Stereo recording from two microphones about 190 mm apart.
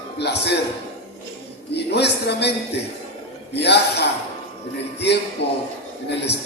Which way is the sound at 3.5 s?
65° left (ahead or behind).